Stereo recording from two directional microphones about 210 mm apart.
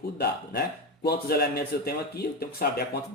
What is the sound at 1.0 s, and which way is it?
Speech, 50° left (ahead or behind).